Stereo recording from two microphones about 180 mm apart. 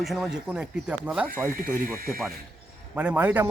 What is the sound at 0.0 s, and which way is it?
A man's voice, centre (ahead or behind).